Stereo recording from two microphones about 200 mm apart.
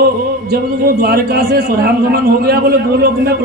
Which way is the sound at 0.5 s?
50° right (ahead or behind).